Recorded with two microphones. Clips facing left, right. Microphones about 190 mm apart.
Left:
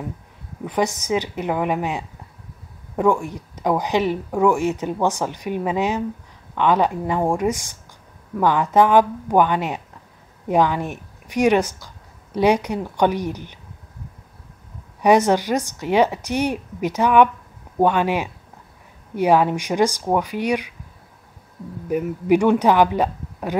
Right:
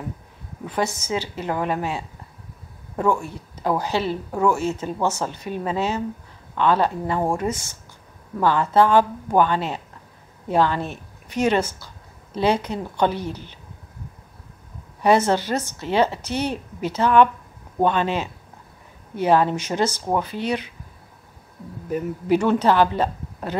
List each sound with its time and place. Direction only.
0.7 s speech: 15° left (ahead or behind)
15.0 s speech: 15° left (ahead or behind)
21.8 s speech: 15° left (ahead or behind)